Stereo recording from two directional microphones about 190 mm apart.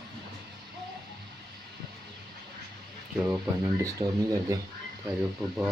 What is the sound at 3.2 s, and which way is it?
Speech, 15° right (ahead or behind).